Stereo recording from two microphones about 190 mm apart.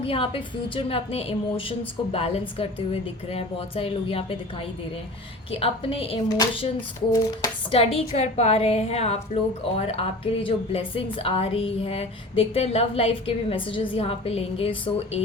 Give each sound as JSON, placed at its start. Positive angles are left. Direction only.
{"t": 0.0, "sound": "a woman's voice", "side_deg": 30}